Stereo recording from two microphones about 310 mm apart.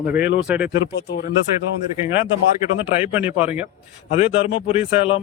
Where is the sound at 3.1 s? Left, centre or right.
Centre.